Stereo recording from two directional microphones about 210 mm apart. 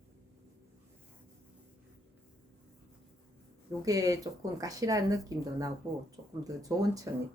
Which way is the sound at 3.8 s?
15° right (ahead or behind).